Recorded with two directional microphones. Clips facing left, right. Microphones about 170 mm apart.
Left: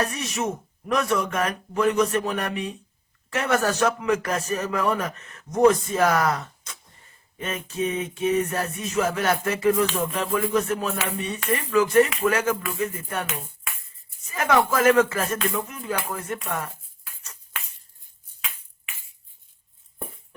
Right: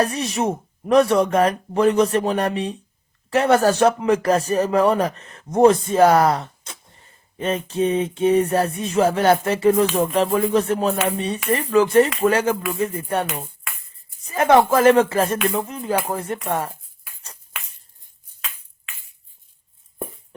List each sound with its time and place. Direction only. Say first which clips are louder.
0.0 s speech: right 5 dB; 30° right (ahead or behind)
14.3 s speech: right 6 dB; 30° right (ahead or behind)